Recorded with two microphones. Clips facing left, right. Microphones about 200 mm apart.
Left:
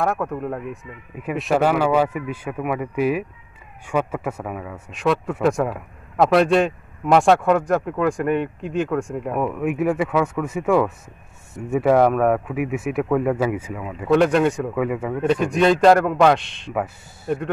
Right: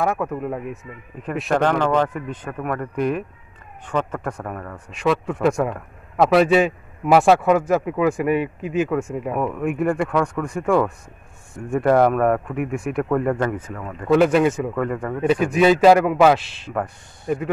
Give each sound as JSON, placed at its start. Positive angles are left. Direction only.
{"t": 0.0, "sound": "speech", "side_deg": 0}